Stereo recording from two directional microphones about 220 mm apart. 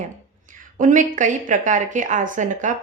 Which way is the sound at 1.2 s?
35° right (ahead or behind).